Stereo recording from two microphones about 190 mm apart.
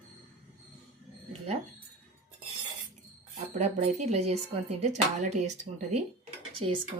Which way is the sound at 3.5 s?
35° right (ahead or behind).